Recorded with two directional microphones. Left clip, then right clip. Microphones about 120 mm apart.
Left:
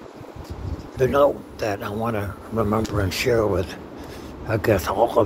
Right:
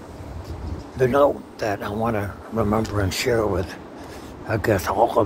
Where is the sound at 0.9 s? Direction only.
25° right (ahead or behind).